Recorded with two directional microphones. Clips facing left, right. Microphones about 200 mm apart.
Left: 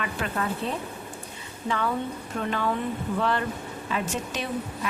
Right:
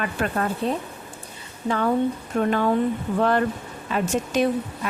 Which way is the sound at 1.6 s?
40° right (ahead or behind).